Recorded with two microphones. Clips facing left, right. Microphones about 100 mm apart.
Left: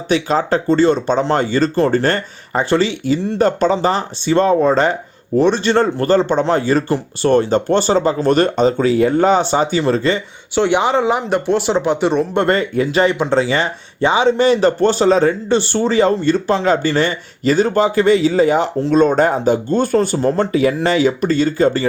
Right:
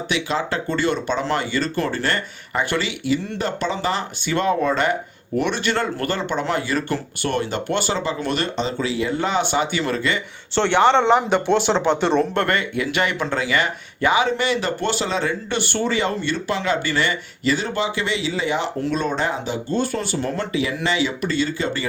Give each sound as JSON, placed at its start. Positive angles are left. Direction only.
{"t": 0.1, "sound": "speech", "side_deg": 40}
{"t": 10.5, "sound": "speech", "side_deg": 10}
{"t": 12.3, "sound": "speech", "side_deg": 20}
{"t": 12.5, "sound": "speech", "side_deg": 35}